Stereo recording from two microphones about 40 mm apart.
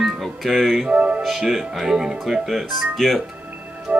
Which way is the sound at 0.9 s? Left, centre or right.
Right.